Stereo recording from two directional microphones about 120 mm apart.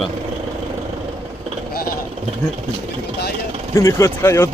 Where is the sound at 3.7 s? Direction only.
25° left (ahead or behind).